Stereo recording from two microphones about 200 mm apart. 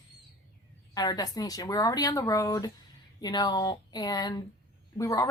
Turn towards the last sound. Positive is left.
turn(degrees=15)  # may be behind; listen again after turning